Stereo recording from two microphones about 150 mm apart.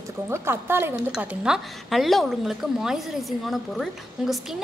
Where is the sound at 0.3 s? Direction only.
15° right (ahead or behind).